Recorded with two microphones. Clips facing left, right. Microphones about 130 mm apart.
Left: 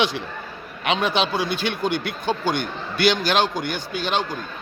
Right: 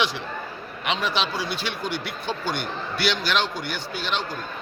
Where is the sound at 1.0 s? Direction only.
55° left (ahead or behind).